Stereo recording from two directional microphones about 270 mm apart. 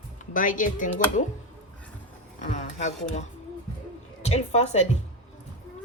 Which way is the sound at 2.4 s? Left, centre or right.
Left.